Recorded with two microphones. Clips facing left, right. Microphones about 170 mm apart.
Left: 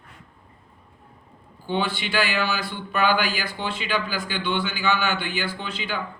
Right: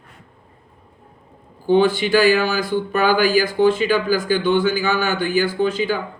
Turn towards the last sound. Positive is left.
turn(degrees=-45)  # may be behind; listen again after turning